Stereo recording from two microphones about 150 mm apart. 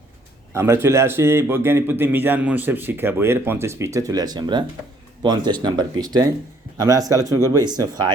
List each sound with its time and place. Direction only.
0.5 s a man's voice: 15° right (ahead or behind)